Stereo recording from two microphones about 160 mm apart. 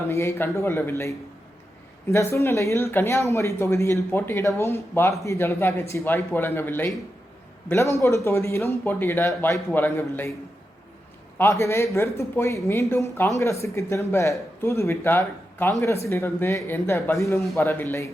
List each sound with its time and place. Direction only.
0.1 s speech: 15° left (ahead or behind)
8.0 s speech: 20° left (ahead or behind)
11.3 s speech: 15° left (ahead or behind)